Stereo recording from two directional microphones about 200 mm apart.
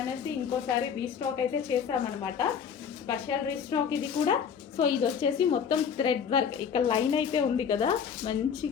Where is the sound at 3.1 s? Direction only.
20° left (ahead or behind).